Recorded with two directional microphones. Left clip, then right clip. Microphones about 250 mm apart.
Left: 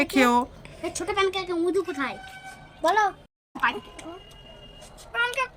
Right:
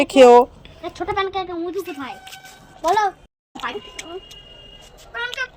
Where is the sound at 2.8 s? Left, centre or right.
Left.